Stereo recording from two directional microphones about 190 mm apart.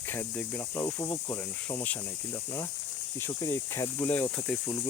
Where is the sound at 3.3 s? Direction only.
15° left (ahead or behind).